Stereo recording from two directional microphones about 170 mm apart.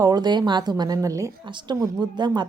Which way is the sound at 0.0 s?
25° right (ahead or behind).